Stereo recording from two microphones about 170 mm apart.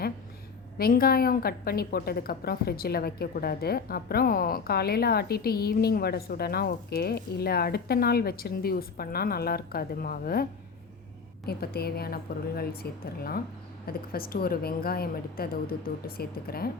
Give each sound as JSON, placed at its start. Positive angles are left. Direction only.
{"t": 0.8, "sound": "a woman's voice", "side_deg": 60}
{"t": 11.4, "sound": "a woman's voice", "side_deg": 70}